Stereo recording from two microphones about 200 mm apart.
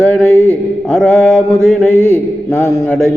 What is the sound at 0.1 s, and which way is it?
Mantra, 5° left (ahead or behind).